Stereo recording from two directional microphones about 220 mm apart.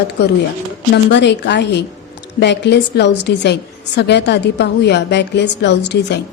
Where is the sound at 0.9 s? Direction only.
50° left (ahead or behind).